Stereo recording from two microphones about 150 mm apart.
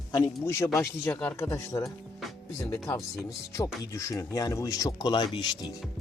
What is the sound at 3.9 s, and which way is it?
Speech, 20° left (ahead or behind).